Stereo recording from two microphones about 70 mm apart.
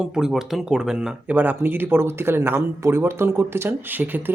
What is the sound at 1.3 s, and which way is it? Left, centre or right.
Speech, right.